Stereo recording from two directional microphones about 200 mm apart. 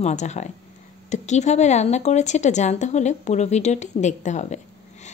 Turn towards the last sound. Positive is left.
turn(degrees=35)  # may be behind; listen again after turning